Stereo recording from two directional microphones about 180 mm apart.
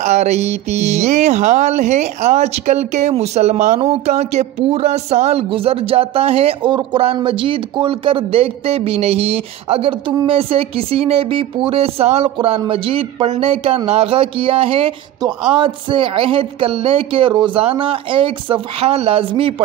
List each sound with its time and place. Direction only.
0.0 s speech: 40° right (ahead or behind)